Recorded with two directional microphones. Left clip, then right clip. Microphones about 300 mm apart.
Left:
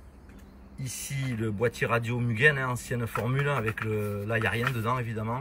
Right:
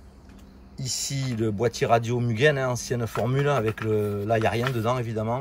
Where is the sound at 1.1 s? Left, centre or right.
Centre.